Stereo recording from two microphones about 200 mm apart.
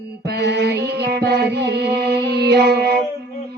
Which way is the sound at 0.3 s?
55° right (ahead or behind).